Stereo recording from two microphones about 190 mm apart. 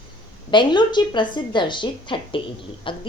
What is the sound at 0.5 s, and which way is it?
A woman's voice, 25° left (ahead or behind).